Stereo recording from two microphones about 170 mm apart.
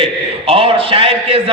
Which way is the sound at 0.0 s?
35° right (ahead or behind).